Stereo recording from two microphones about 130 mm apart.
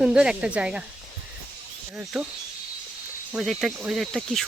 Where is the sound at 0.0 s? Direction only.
5° right (ahead or behind).